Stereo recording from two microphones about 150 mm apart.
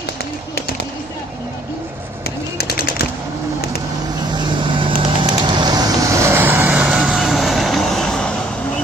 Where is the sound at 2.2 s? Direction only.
90° left.